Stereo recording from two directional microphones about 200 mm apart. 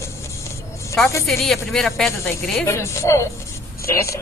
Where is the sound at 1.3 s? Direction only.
Centre (ahead or behind).